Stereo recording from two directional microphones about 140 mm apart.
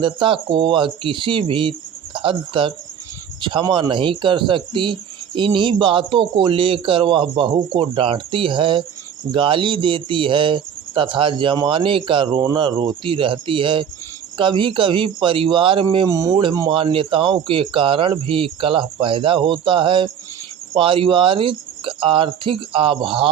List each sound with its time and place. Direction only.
0.0 s speech: 35° right (ahead or behind)
16.0 s speech: 25° right (ahead or behind)
16.4 s speech: 35° right (ahead or behind)